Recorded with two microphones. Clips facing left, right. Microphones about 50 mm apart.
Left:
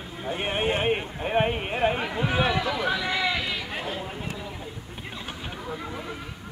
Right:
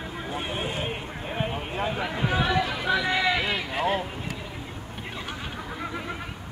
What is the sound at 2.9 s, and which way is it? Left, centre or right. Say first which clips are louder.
Chatter: right 3 dB; right.